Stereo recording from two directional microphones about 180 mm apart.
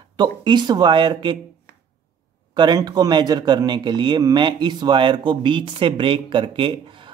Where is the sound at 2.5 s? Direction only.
25° right (ahead or behind).